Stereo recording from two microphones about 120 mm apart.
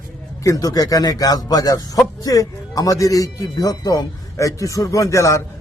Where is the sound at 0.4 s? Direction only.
30° left (ahead or behind).